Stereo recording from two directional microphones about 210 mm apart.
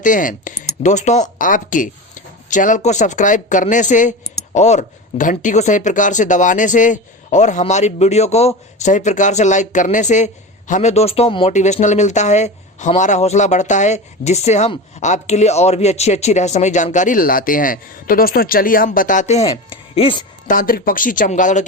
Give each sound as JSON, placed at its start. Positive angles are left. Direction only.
{"t": 0.0, "sound": "a woman's voice", "side_deg": 40}
{"t": 20.5, "sound": "speech", "side_deg": 40}